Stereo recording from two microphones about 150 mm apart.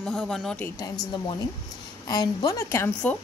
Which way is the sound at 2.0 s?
25° left (ahead or behind).